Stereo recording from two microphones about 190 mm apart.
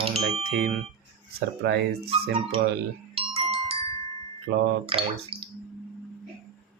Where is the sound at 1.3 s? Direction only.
55° right (ahead or behind).